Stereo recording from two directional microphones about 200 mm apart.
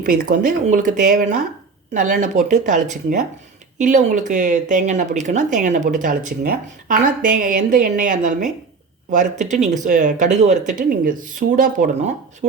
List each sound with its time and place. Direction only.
0.0 s speech: 45° right (ahead or behind)